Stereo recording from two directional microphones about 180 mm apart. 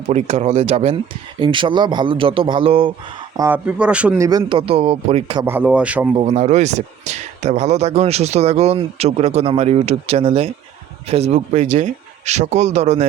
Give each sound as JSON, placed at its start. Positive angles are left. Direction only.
{"t": 0.1, "sound": "speech", "side_deg": -35}
{"t": 3.3, "sound": "speech", "side_deg": -15}
{"t": 4.2, "sound": "speech", "side_deg": -20}
{"t": 5.4, "sound": "speech", "side_deg": -10}
{"t": 6.1, "sound": "speech", "side_deg": -40}